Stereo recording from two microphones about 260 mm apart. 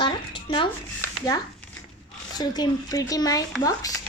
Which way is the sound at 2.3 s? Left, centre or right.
Centre.